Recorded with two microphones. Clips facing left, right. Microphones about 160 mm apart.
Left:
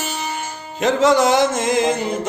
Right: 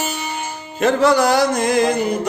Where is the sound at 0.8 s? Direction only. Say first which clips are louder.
Even; 20° left (ahead or behind).